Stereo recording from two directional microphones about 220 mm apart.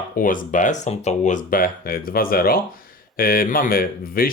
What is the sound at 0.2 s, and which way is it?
Speech, 35° left (ahead or behind).